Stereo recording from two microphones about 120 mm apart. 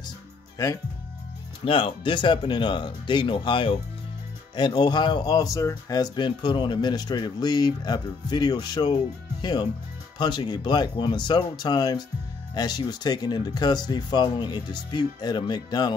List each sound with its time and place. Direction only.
0.6 s speech: 30° left (ahead or behind)
1.6 s speech: 45° left (ahead or behind)